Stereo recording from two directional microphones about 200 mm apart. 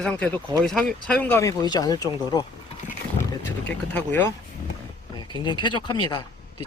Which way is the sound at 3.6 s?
10° left (ahead or behind).